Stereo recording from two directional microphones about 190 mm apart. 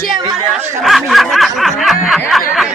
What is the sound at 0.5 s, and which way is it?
Speech, 10° right (ahead or behind).